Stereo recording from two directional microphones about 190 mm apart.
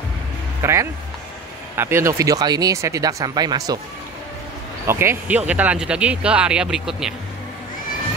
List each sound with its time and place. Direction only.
0.6 s speech: 15° right (ahead or behind)
4.8 s speech: 15° right (ahead or behind)